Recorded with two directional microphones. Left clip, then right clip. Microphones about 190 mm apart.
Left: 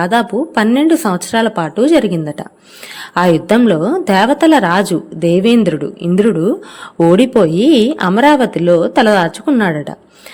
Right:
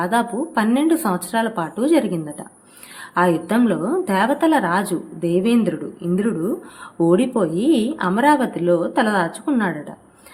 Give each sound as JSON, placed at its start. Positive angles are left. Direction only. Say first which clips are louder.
{"t": 0.0, "sound": "a woman's voice", "louder": "left 6 dB", "side_deg": 40}